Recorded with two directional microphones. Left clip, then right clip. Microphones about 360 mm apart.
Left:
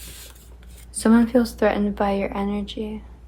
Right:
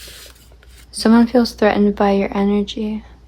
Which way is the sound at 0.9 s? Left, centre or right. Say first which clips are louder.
Right 5 dB; right.